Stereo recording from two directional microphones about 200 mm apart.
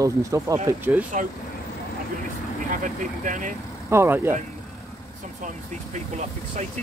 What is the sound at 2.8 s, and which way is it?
Speech, 40° right (ahead or behind).